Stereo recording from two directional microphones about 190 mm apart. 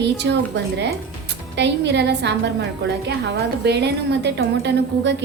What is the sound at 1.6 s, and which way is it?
A woman's voice, 65° right (ahead or behind).